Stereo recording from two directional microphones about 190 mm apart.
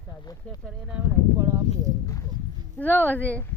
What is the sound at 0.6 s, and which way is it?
Speech, 5° right (ahead or behind).